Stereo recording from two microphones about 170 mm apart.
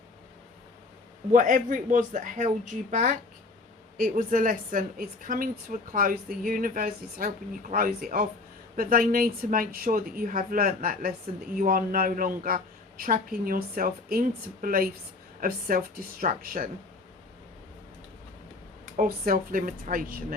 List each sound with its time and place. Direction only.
1.3 s a woman's voice: 50° right (ahead or behind)
18.9 s a woman's voice: 60° right (ahead or behind)